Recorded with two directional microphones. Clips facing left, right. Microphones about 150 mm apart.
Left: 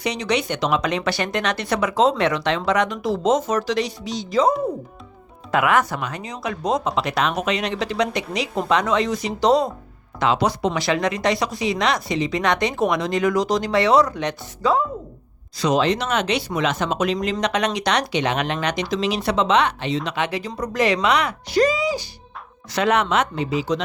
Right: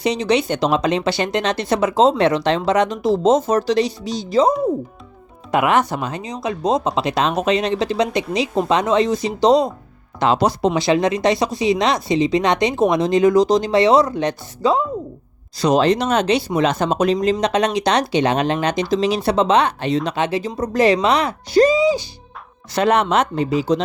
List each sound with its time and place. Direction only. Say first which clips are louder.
0.0 s speech: right 5 dB; 25° right (ahead or behind)
5.5 s speech: right 2 dB; 25° right (ahead or behind)
10.2 s speech: right 3 dB; 35° right (ahead or behind)
10.8 s speech: right 5 dB; 25° right (ahead or behind)